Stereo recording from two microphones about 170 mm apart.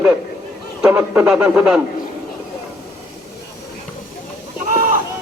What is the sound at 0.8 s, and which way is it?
A man's voice, 10° right (ahead or behind).